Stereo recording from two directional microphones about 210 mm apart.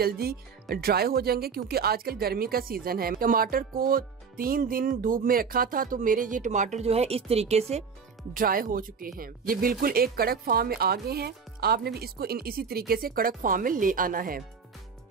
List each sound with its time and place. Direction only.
0.0 s speech: 45° right (ahead or behind); by 7.8 s 30° right (ahead or behind)
8.3 s speech: 40° right (ahead or behind)